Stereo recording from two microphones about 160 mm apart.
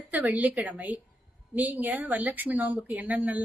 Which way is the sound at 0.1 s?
10° right (ahead or behind).